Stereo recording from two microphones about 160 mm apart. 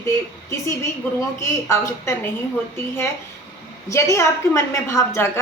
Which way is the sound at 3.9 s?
20° left (ahead or behind).